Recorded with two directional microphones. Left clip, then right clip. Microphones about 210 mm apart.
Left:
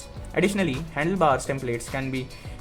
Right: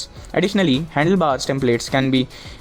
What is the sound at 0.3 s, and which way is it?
Speech, 40° right (ahead or behind).